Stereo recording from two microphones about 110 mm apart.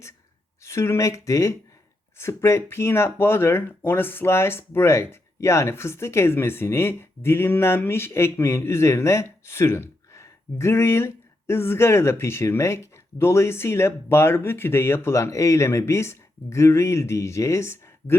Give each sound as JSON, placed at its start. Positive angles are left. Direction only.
{"t": 0.6, "sound": "speech", "side_deg": 25}